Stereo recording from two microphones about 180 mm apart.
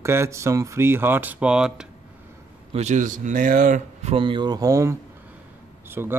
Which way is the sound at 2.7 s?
40° right (ahead or behind).